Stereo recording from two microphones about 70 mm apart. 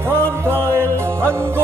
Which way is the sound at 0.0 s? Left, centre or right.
Right.